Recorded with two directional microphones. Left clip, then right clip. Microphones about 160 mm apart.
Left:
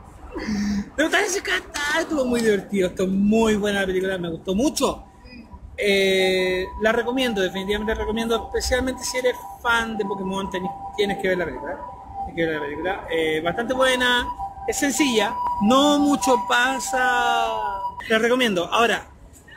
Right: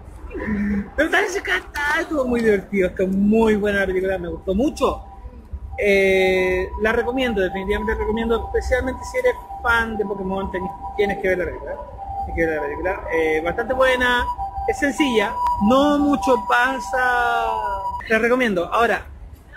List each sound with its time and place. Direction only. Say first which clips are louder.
0.9 s speech: right 2 dB; 30° left (ahead or behind)